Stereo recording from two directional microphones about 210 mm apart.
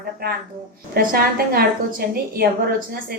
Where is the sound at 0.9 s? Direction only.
45° right (ahead or behind).